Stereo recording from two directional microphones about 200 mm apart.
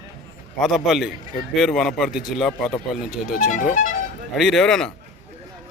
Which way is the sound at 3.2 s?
40° left (ahead or behind).